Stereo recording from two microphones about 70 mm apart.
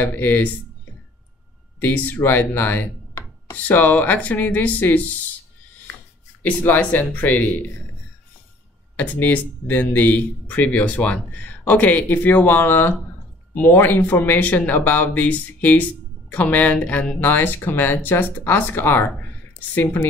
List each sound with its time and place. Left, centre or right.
0.0 s speech: left
1.8 s speech: left
6.4 s speech: left
8.9 s speech: left